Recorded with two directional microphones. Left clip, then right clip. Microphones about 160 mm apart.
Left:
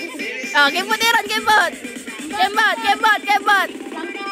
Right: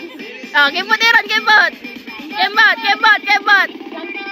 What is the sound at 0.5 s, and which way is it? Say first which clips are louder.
Speech: right 3 dB; 5° left (ahead or behind).